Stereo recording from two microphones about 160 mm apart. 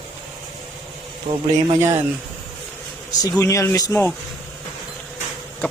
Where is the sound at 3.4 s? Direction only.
20° left (ahead or behind).